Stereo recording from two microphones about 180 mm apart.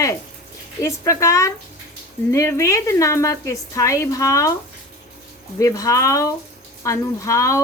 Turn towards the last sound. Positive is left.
turn(degrees=15)  # may be behind; listen again after turning